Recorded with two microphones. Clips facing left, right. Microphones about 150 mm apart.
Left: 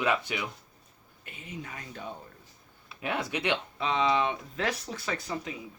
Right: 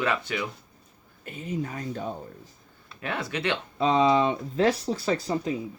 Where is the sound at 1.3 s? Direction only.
40° right (ahead or behind).